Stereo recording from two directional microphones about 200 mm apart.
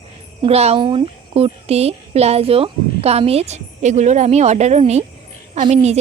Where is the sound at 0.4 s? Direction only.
30° right (ahead or behind).